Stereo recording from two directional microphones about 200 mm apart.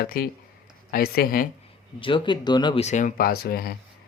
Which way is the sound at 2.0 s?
25° left (ahead or behind).